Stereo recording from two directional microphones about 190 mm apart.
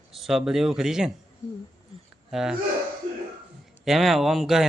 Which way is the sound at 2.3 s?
Centre (ahead or behind).